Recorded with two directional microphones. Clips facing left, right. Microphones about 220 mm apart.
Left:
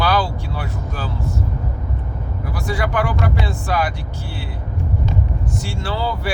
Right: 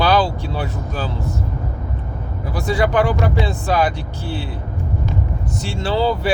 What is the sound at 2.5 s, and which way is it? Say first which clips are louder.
Speech: right 5 dB; 20° right (ahead or behind).